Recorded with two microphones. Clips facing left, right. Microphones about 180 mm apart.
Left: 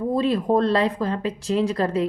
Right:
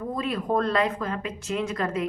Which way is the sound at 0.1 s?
30° left (ahead or behind).